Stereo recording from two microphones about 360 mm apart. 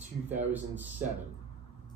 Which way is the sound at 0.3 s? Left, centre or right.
Centre.